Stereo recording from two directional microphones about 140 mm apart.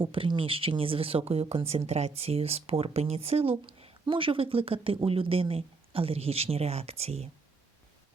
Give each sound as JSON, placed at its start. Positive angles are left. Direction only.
{"t": 0.0, "sound": "speech", "side_deg": -35}